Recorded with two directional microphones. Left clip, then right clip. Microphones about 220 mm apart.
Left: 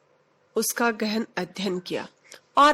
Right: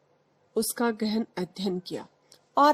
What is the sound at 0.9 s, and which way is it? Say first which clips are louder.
Speech: left 3 dB; 20° left (ahead or behind).